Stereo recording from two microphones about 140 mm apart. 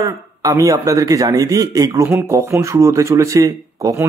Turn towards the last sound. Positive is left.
turn(degrees=-25)  # may be behind; listen again after turning